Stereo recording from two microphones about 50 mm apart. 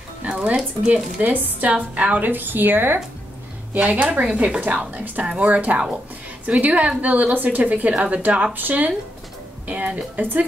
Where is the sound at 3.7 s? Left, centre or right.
Right.